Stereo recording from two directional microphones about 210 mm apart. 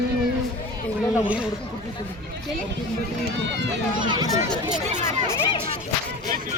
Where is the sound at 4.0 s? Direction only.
20° right (ahead or behind).